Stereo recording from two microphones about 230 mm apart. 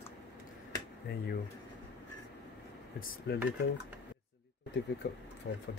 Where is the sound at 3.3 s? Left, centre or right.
Left.